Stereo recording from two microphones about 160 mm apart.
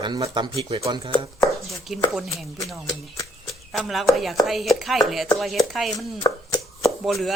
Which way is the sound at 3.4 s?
Centre (ahead or behind).